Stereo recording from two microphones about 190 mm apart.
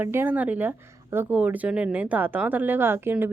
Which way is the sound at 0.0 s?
10° right (ahead or behind).